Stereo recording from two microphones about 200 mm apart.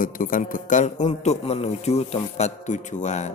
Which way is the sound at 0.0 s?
45° left (ahead or behind).